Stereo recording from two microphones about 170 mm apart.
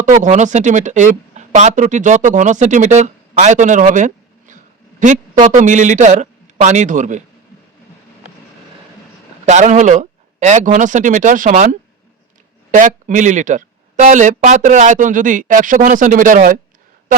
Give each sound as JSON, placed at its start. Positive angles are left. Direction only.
{"t": 0.0, "sound": "speech", "side_deg": -45}
{"t": 9.5, "sound": "speech", "side_deg": -45}